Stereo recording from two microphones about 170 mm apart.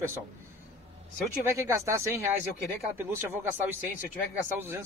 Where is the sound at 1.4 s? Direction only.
15° right (ahead or behind).